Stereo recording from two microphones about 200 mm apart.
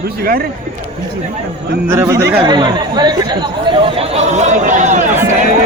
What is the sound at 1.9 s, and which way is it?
Speech, 15° right (ahead or behind).